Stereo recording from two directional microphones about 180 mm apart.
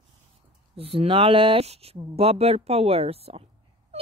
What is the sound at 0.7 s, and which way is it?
Speech, 30° right (ahead or behind).